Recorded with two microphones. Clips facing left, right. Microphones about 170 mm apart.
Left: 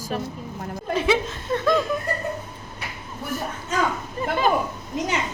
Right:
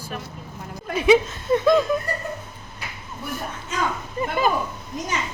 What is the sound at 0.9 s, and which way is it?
Speech, 15° right (ahead or behind).